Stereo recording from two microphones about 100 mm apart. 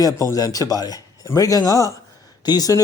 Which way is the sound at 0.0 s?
35° left (ahead or behind).